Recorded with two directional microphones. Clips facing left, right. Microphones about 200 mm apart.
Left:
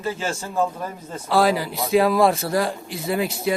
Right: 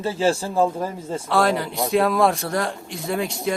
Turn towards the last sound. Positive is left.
turn(degrees=5)  # may be behind; listen again after turning